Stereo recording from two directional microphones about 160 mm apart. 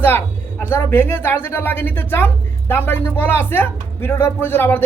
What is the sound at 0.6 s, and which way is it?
A woman's voice, 15° left (ahead or behind).